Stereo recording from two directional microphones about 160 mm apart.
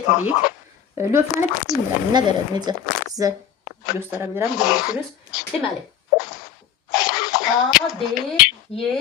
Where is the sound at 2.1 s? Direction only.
25° right (ahead or behind).